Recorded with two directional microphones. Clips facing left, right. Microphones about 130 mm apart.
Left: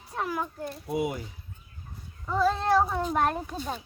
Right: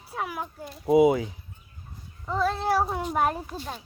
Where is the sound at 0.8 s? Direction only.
90° right.